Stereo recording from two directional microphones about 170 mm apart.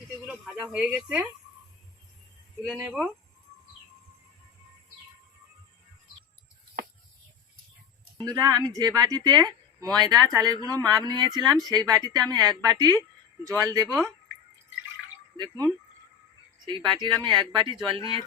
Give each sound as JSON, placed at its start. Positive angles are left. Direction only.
{"t": 0.3, "sound": "speech", "side_deg": -5}
{"t": 2.7, "sound": "speech", "side_deg": -5}
{"t": 8.2, "sound": "speech", "side_deg": -20}
{"t": 13.8, "sound": "speech", "side_deg": 5}
{"t": 15.4, "sound": "speech", "side_deg": -25}